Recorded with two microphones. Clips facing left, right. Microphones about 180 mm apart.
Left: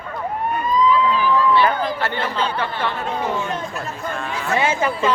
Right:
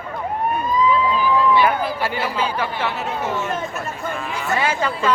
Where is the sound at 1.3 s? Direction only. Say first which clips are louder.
Right 1 dB; 15° right (ahead or behind).